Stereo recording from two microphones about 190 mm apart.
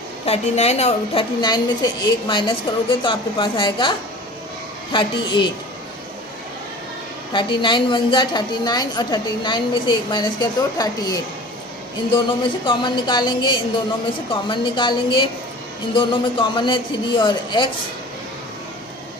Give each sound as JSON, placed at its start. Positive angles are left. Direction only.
{"t": 0.3, "sound": "a woman's voice", "side_deg": 35}
{"t": 7.3, "sound": "a woman's voice", "side_deg": 25}